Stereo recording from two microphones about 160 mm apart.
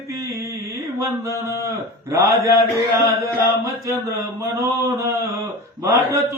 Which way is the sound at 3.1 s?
20° right (ahead or behind).